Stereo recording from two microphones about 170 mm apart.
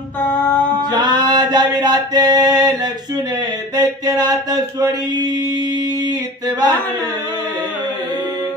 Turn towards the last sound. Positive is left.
turn(degrees=-25)  # may be behind; listen again after turning